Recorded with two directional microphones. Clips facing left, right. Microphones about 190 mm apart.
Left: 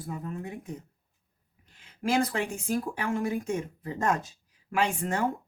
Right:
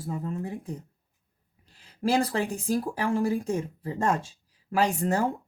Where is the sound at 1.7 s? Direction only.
35° right (ahead or behind).